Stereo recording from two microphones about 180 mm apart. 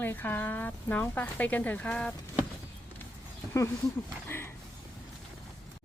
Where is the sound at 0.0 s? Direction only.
10° left (ahead or behind).